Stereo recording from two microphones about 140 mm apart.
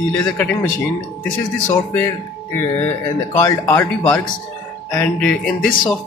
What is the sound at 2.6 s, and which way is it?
Speech, 15° left (ahead or behind).